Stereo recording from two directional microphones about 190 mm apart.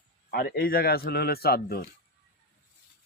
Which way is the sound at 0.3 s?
50° left (ahead or behind).